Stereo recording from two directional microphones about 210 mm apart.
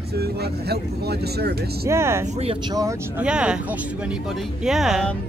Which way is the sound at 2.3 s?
30° right (ahead or behind).